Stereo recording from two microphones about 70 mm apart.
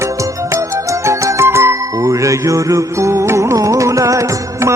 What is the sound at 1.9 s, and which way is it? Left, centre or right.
Music, right.